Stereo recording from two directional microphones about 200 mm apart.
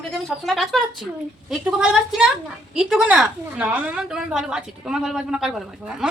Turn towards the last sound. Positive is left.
turn(degrees=-5)  # may be behind; listen again after turning